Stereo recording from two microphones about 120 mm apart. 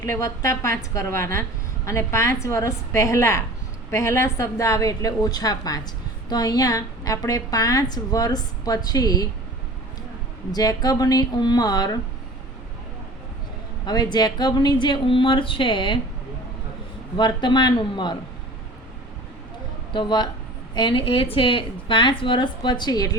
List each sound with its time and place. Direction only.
0.0 s a woman's voice: 25° left (ahead or behind)
10.5 s a woman's voice: 30° left (ahead or behind)
13.8 s a woman's voice: 35° left (ahead or behind)
17.2 s a woman's voice: 40° left (ahead or behind)
19.9 s a woman's voice: 40° left (ahead or behind)